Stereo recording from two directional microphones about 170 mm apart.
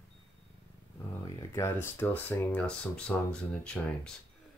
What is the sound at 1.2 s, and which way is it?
Speech, 20° left (ahead or behind).